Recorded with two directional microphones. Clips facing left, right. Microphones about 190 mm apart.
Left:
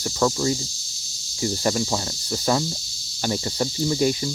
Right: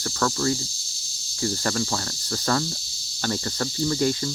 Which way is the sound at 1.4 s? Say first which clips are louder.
Left 3 dB; 15° left (ahead or behind).